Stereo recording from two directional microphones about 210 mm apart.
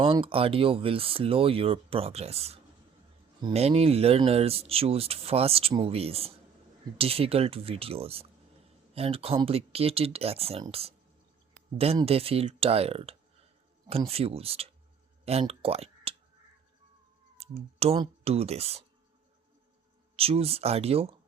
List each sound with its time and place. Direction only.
0.0 s speech: 25° right (ahead or behind)
15.2 s a sound: 30° right (ahead or behind)
17.3 s speech: 30° right (ahead or behind)
20.1 s speech: 30° right (ahead or behind)